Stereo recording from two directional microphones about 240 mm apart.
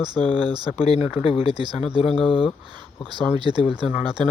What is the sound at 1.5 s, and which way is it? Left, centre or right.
Speech, centre.